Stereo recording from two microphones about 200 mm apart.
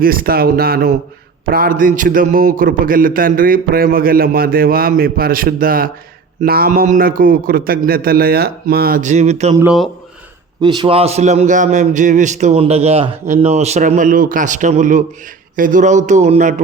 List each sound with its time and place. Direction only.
0.0 s a man's voice: 45° right (ahead or behind)
10.6 s a man's voice: 20° right (ahead or behind); by 16.6 s 35° right (ahead or behind)